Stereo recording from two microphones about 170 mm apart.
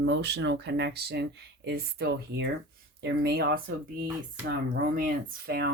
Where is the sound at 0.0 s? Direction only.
85° right.